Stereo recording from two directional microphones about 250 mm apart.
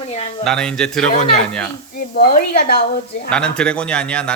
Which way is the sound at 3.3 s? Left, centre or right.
Centre.